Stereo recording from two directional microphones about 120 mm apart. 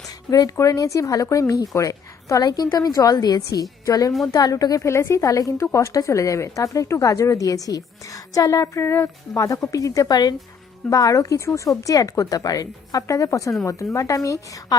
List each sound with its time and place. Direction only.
0.3 s a woman's voice: 30° left (ahead or behind)